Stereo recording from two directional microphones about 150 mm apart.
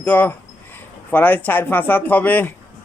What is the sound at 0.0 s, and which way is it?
Speech, 10° left (ahead or behind).